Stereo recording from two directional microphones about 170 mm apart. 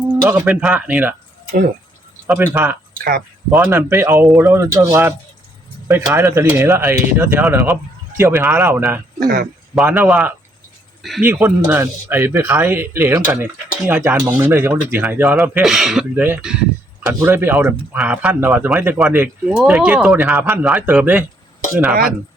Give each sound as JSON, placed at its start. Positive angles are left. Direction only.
{"t": 0.1, "sound": "speech", "side_deg": -10}
{"t": 2.2, "sound": "speech", "side_deg": -10}
{"t": 3.0, "sound": "speech", "side_deg": -60}
{"t": 3.5, "sound": "speech", "side_deg": -15}
{"t": 9.2, "sound": "speech", "side_deg": -70}
{"t": 9.7, "sound": "speech", "side_deg": -10}